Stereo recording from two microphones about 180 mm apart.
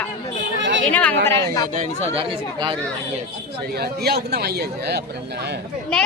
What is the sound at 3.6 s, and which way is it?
Speech, 60° right (ahead or behind).